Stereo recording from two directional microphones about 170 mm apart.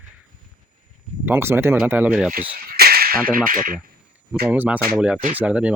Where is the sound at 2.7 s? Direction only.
65° right (ahead or behind).